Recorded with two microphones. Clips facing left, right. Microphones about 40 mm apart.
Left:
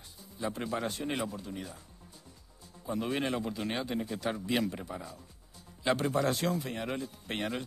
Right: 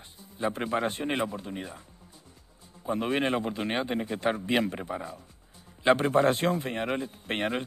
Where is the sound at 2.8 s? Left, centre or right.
Right.